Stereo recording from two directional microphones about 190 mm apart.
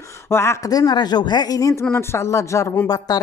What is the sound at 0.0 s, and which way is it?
A woman's voice, 15° left (ahead or behind).